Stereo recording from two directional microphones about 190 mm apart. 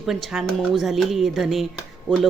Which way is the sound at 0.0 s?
Centre (ahead or behind).